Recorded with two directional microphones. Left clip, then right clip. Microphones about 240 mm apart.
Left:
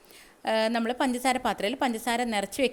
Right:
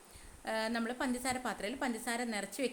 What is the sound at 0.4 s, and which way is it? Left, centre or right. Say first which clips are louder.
A woman's voice: left 10 dB; left.